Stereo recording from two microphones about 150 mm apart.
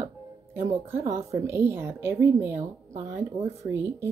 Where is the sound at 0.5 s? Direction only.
20° right (ahead or behind).